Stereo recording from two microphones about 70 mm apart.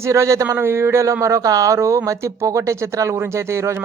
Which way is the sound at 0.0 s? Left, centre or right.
Right.